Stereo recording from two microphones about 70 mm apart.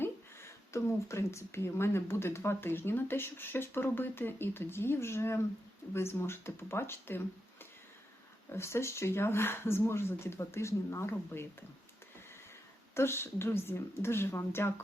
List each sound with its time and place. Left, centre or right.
0.0 s speech: left
8.5 s speech: left
12.9 s speech: left